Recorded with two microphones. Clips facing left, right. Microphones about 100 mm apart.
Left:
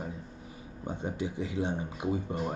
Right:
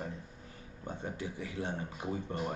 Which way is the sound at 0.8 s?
20° left (ahead or behind).